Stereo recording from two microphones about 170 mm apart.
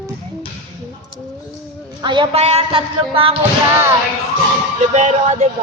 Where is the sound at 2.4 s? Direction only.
35° right (ahead or behind).